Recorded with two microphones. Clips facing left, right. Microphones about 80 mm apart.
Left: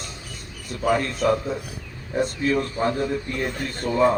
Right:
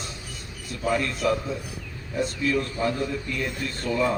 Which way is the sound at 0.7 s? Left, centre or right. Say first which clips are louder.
Left 3 dB; left.